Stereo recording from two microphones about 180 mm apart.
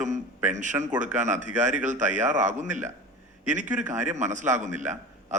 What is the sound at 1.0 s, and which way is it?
A man's voice, 40° right (ahead or behind).